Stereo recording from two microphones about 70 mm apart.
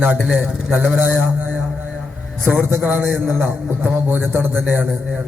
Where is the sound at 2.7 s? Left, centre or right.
Right.